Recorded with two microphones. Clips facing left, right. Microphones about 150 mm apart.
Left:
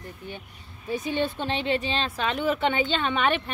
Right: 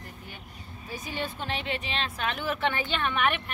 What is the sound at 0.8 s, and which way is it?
A woman's voice, 25° left (ahead or behind).